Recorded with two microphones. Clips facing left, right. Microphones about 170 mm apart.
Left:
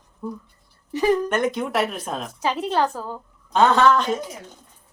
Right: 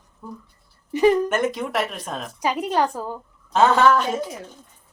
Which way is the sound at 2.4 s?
15° right (ahead or behind).